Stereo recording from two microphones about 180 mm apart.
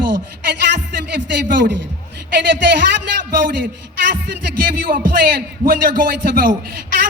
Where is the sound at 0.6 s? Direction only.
75° right (ahead or behind).